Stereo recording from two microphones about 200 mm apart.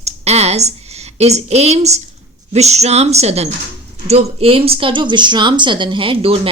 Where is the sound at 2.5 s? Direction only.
35° right (ahead or behind).